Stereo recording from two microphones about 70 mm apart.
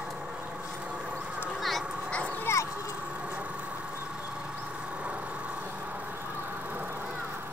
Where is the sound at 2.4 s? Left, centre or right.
Left.